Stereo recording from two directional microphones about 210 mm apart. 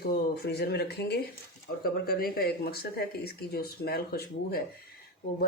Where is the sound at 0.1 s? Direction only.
50° left (ahead or behind).